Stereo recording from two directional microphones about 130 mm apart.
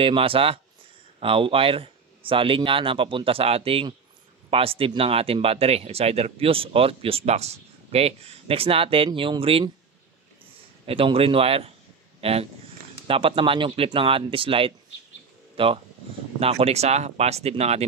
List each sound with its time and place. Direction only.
0.0 s speech: 45° right (ahead or behind)
10.9 s speech: 45° right (ahead or behind)